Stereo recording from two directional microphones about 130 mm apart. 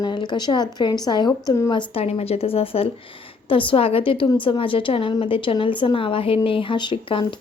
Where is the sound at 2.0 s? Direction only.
50° left (ahead or behind).